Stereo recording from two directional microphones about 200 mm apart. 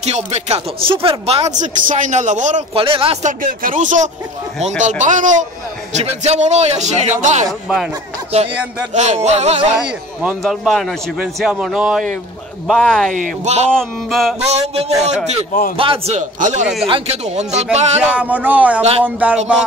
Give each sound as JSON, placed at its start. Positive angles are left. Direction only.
{"t": 0.0, "sound": "speech", "side_deg": -35}
{"t": 7.4, "sound": "speech", "side_deg": 0}
{"t": 8.9, "sound": "speech", "side_deg": -35}
{"t": 9.8, "sound": "speech", "side_deg": -5}
{"t": 13.1, "sound": "speech", "side_deg": -35}
{"t": 13.7, "sound": "speech", "side_deg": 0}
{"t": 14.5, "sound": "speech", "side_deg": -35}
{"t": 18.0, "sound": "speech", "side_deg": -5}
{"t": 18.8, "sound": "speech", "side_deg": -30}
{"t": 19.0, "sound": "speech", "side_deg": -5}